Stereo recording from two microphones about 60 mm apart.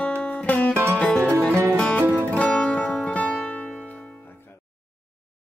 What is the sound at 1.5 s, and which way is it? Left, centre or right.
Music, right.